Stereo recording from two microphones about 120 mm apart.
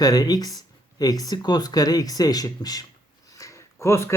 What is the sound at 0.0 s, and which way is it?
Speech, 30° left (ahead or behind).